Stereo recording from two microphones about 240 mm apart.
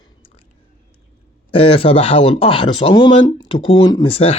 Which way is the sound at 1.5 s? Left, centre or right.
Left.